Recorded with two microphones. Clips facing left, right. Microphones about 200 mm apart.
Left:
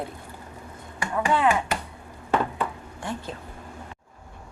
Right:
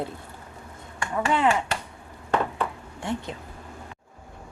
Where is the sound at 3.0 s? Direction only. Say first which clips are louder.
Right 3 dB; 25° right (ahead or behind).